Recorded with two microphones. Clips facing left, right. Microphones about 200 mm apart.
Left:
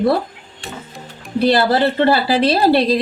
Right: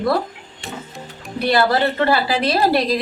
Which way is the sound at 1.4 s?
30° left (ahead or behind).